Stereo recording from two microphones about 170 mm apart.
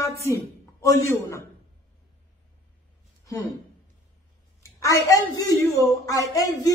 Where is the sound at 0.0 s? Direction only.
15° left (ahead or behind).